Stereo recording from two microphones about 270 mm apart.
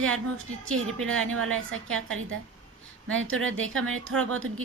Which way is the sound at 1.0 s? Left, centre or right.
Right.